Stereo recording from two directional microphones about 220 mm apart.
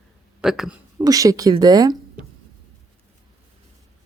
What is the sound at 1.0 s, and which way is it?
Speech, 15° right (ahead or behind).